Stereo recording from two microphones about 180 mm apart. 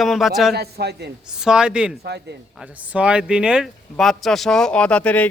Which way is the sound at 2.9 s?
5° right (ahead or behind).